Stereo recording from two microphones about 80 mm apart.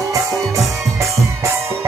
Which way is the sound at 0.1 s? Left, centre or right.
Right.